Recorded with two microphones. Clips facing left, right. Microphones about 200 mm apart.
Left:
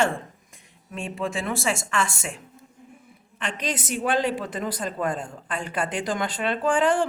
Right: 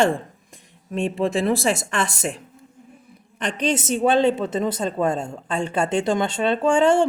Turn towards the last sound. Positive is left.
turn(degrees=-25)  # may be behind; listen again after turning